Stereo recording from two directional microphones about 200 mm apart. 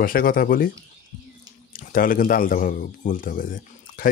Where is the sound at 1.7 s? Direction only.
45° left (ahead or behind).